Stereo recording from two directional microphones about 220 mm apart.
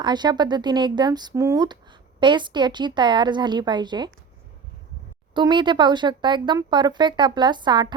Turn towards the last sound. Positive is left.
turn(degrees=-20)  # may be behind; listen again after turning